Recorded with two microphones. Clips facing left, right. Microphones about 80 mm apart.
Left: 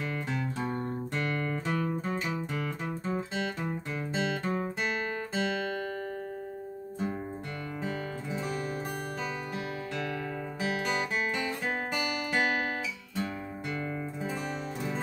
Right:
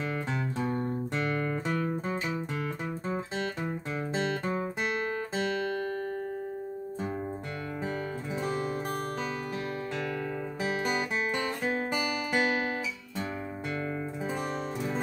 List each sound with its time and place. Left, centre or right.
1.1 s music: centre
10.6 s music: right